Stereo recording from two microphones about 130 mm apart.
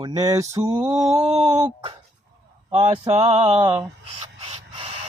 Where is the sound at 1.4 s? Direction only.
35° right (ahead or behind).